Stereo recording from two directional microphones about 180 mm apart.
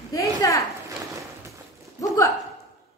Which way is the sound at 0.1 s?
20° left (ahead or behind).